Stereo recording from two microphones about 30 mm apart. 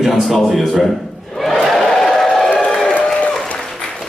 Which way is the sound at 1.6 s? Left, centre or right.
Centre.